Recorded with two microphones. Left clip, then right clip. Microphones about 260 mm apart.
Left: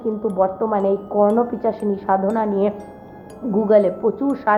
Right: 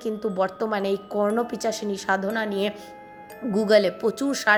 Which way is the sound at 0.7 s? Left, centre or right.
Right.